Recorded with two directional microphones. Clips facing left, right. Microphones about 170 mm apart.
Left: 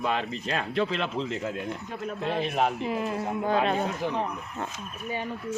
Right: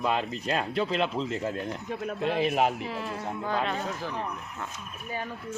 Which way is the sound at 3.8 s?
65° left (ahead or behind).